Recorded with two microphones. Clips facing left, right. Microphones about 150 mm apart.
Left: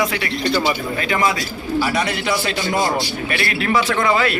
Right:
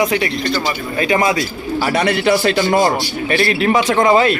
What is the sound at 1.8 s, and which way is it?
A man's voice, 60° right (ahead or behind).